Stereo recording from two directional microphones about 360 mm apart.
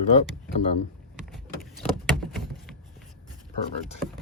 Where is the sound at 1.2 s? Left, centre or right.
Centre.